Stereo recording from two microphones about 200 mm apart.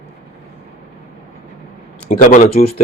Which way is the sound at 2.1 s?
40° left (ahead or behind).